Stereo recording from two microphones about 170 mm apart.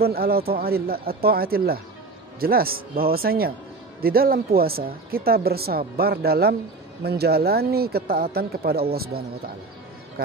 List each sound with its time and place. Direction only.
0.0 s speech: 65° right (ahead or behind)